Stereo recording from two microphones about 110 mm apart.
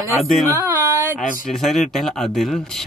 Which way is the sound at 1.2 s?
Centre (ahead or behind).